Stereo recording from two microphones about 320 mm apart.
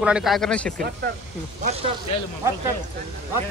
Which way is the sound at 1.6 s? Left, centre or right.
Centre.